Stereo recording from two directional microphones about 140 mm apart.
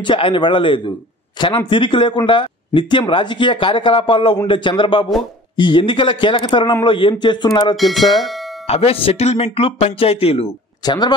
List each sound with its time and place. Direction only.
0.0 s speech: 35° left (ahead or behind)
7.7 s speech: centre (ahead or behind)
8.6 s speech: 45° left (ahead or behind)
10.9 s speech: 30° left (ahead or behind)